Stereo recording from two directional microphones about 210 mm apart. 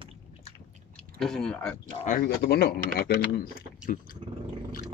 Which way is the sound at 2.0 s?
45° left (ahead or behind).